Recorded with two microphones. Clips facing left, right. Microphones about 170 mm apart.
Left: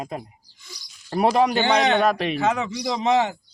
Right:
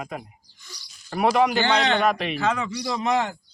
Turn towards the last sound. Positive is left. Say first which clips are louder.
# left 3 dB
turn(degrees=20)  # may be behind; listen again after turning